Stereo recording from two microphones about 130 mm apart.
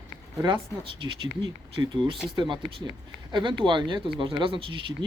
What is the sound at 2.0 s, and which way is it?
Speech, 35° right (ahead or behind).